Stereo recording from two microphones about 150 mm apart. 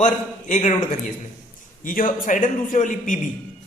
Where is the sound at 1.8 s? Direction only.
65° left (ahead or behind).